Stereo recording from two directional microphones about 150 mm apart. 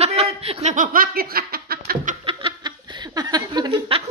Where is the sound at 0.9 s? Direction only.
75° right (ahead or behind).